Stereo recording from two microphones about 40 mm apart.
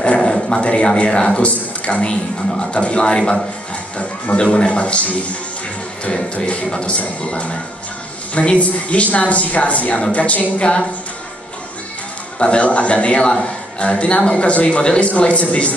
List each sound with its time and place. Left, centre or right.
0.2 s a sound: centre
0.8 s speech: left
6.2 s a man's voice: left
10.6 s speech: left
12.4 s a man's voice: left